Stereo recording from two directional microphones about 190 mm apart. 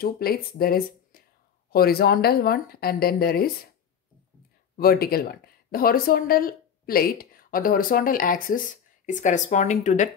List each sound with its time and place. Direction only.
0.0 s speech: 50° left (ahead or behind)
1.1 s a sound: 50° left (ahead or behind)
1.7 s speech: 55° left (ahead or behind)
4.7 s speech: 50° left (ahead or behind)